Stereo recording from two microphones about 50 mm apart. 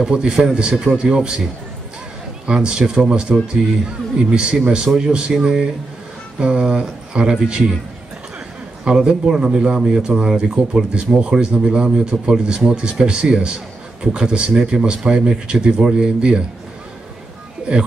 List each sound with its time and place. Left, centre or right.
0.0 s speech: centre
2.4 s speech: centre
8.8 s speech: centre
17.7 s speech: right